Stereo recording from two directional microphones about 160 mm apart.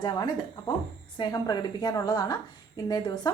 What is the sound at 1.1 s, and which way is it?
A woman's voice, 25° left (ahead or behind).